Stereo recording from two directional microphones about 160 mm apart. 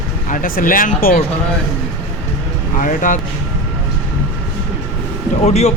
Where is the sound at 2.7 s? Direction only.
55° left (ahead or behind).